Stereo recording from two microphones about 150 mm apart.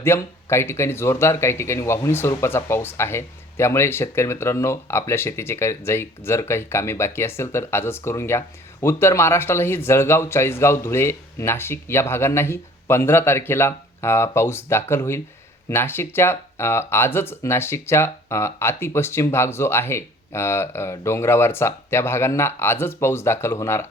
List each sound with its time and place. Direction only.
0.0 s speech: 15° left (ahead or behind)